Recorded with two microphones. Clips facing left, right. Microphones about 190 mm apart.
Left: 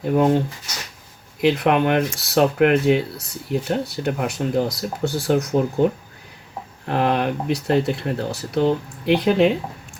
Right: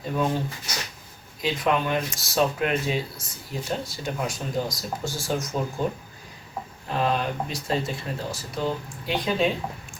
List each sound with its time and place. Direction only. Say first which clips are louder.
0.0 s speech: left 8 dB; 65° left (ahead or behind)
1.4 s speech: left 7 dB; 65° left (ahead or behind)
6.8 s speech: left 5 dB; 65° left (ahead or behind)